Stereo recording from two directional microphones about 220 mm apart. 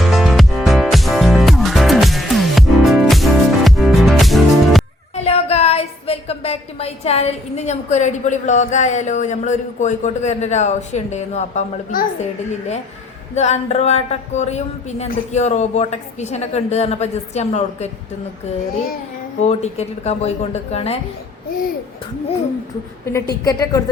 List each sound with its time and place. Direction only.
0.0 s music: centre (ahead or behind)
5.1 s a woman's voice: 30° left (ahead or behind)
19.4 s speech: 30° left (ahead or behind)
23.1 s a woman's voice: 15° left (ahead or behind)